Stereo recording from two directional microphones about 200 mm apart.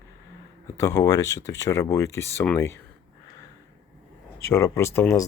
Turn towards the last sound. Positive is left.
turn(degrees=15)  # may be behind; listen again after turning